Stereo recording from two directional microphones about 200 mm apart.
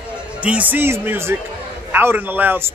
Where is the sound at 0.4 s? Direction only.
5° right (ahead or behind).